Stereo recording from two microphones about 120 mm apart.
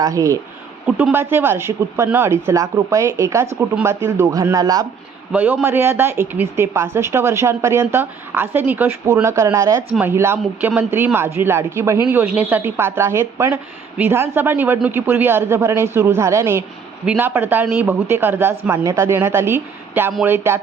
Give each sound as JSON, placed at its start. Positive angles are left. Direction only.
{"t": 0.0, "sound": "a woman's voice", "side_deg": -25}
{"t": 0.9, "sound": "a man's voice", "side_deg": -5}
{"t": 1.1, "sound": "a woman's voice", "side_deg": -20}
{"t": 5.3, "sound": "a woman's voice", "side_deg": -10}